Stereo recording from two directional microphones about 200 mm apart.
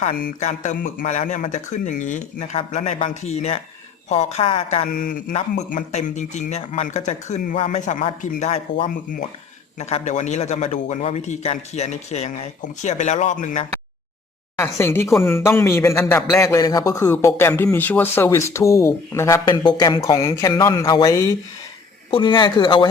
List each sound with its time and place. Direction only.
0.0 s speech: 35° left (ahead or behind)
14.6 s speech: 10° left (ahead or behind)